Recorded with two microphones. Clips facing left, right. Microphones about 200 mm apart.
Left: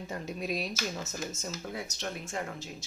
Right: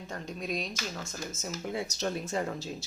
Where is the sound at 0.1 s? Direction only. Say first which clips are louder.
Left 1 dB; 5° left (ahead or behind).